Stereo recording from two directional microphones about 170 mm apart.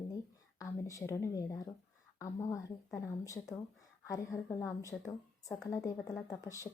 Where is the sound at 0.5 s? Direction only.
20° left (ahead or behind).